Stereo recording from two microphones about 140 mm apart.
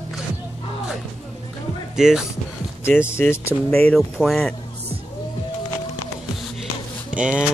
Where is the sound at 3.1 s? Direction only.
15° left (ahead or behind).